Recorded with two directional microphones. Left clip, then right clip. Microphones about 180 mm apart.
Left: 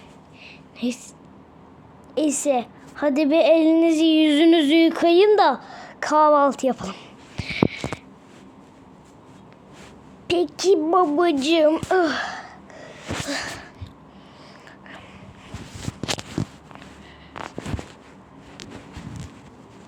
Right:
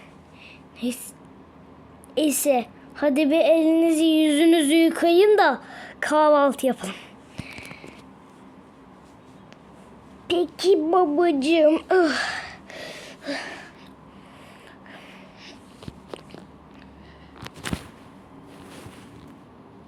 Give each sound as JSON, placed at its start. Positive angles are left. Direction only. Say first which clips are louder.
{"t": 0.8, "sound": "a woman's voice", "louder": "left 2 dB", "side_deg": 5}
{"t": 2.1, "sound": "a woman's voice", "louder": "even", "side_deg": -10}
{"t": 3.2, "sound": "music", "louder": "left 3 dB", "side_deg": 10}
{"t": 10.2, "sound": "a child's voice", "louder": "left 1 dB", "side_deg": 0}
{"t": 13.2, "sound": "a sound", "louder": "even", "side_deg": -5}